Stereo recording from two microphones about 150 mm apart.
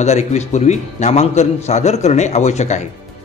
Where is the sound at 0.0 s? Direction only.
50° left (ahead or behind).